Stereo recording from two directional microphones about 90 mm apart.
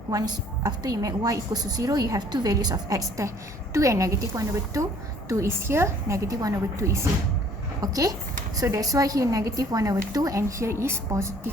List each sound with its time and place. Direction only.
0.1 s a woman's voice: 40° right (ahead or behind)